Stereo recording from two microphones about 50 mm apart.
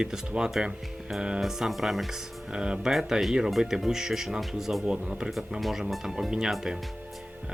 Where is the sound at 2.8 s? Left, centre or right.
Centre.